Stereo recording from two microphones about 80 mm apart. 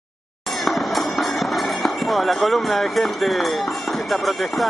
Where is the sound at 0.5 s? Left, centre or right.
Centre.